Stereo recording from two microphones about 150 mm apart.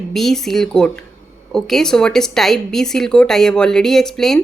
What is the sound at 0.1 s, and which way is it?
Speech, centre (ahead or behind).